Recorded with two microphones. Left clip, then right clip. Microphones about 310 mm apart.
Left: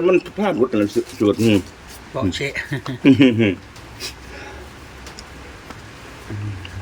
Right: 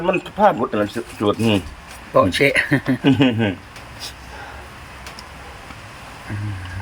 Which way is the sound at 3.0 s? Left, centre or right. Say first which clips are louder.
Left 6 dB; centre.